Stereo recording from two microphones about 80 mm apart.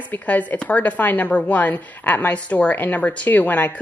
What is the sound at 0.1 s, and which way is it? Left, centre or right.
Speech, left.